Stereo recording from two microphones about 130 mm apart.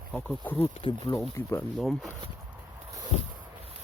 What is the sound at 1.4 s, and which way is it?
Speech, 20° left (ahead or behind).